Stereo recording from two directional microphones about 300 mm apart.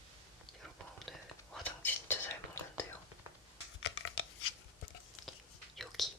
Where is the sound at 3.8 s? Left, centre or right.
Left.